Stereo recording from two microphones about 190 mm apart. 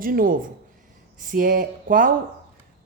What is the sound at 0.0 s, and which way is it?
Speech, 50° right (ahead or behind).